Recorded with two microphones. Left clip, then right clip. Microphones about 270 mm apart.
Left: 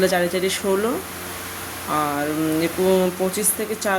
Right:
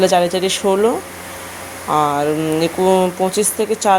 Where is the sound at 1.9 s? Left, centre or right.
Centre.